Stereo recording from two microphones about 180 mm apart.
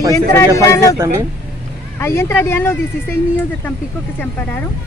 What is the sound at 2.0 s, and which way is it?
Speech, 15° left (ahead or behind).